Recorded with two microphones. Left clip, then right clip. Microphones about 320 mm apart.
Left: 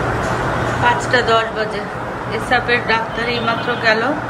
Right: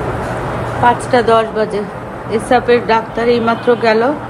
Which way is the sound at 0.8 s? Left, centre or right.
Centre.